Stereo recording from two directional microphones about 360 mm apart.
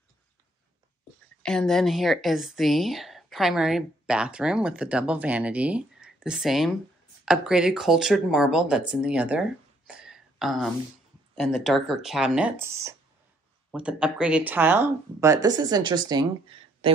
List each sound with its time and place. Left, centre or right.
1.4 s a woman's voice: centre